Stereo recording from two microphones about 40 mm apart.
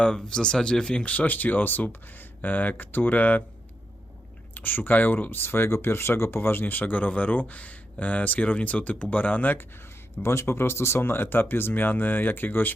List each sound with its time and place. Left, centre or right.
0.0 s speech: left
1.0 s speech: left
4.5 s speech: left
5.5 s speech: left
6.9 s speech: left
10.2 s speech: left